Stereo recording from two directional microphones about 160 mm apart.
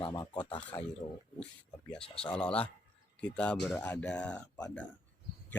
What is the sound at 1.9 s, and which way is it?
Speech, 5° left (ahead or behind).